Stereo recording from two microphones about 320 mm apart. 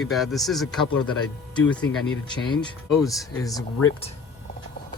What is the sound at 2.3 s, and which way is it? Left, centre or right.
Speech, centre.